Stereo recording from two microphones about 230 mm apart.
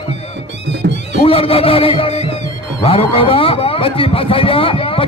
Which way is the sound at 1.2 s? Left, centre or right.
Left.